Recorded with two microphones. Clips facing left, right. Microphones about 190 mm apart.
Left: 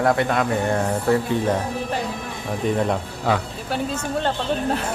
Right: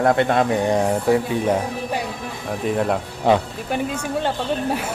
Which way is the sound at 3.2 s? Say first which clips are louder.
Right 5 dB; 15° right (ahead or behind).